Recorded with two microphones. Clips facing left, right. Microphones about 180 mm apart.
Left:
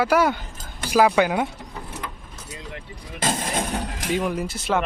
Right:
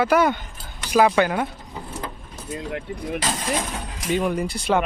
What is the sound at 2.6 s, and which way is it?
Speech, 60° right (ahead or behind).